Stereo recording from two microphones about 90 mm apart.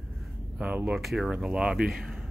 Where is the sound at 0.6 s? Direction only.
15° right (ahead or behind).